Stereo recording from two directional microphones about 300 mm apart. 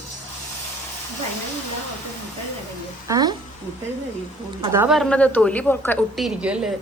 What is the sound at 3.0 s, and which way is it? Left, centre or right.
Speech, centre.